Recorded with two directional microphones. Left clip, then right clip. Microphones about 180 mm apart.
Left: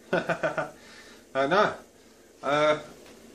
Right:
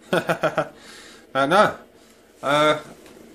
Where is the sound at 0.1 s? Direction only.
50° right (ahead or behind).